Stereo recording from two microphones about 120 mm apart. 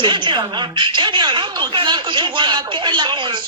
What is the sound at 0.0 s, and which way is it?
A woman's voice, 40° right (ahead or behind).